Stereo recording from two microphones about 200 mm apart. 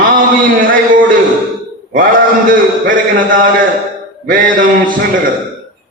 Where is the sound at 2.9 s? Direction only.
45° right (ahead or behind).